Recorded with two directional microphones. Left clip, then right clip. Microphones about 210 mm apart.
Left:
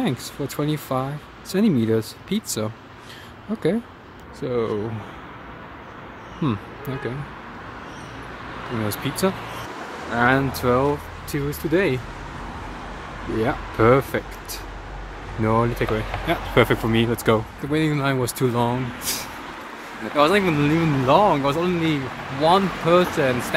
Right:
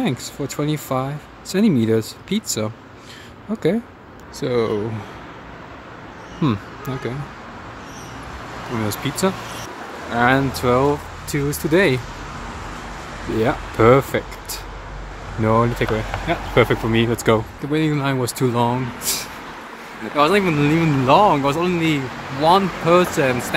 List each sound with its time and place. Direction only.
0.0 s speech: centre (ahead or behind)
4.4 s speech: 20° right (ahead or behind)
6.4 s speech: 10° right (ahead or behind)
8.8 s speech: 5° right (ahead or behind)
13.4 s speech: 10° right (ahead or behind)